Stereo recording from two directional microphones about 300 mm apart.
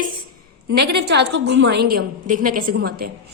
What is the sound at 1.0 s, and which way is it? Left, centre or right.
A woman's voice, right.